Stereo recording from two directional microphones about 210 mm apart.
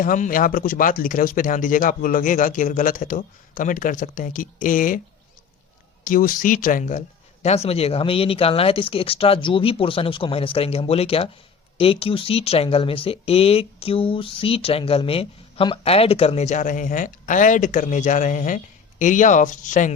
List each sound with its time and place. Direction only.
0.0 s speech: 40° left (ahead or behind)
6.1 s speech: 40° left (ahead or behind)